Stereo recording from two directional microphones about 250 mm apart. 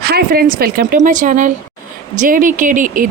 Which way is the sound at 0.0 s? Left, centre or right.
Right.